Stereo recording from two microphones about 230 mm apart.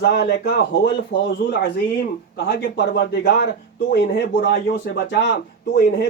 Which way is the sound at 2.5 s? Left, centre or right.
Left.